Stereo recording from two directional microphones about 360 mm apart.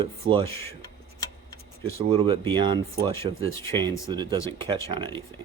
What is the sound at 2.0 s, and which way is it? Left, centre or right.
Speech, centre.